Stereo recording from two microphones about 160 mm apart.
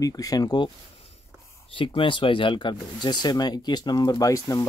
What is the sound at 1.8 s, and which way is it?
Speech, 30° left (ahead or behind).